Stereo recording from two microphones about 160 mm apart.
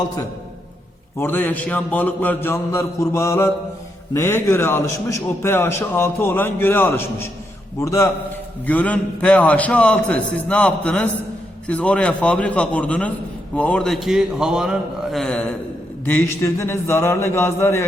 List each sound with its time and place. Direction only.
1.2 s a man's voice: 10° left (ahead or behind)